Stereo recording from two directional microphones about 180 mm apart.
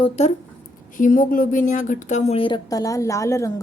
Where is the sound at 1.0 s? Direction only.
50° left (ahead or behind).